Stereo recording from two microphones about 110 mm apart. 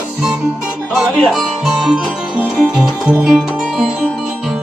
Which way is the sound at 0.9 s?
Centre (ahead or behind).